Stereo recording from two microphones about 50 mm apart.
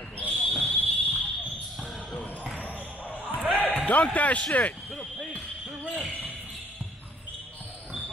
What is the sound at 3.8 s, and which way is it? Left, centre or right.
A man's voice, left.